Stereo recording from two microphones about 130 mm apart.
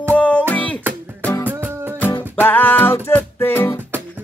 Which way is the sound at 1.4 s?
15° right (ahead or behind).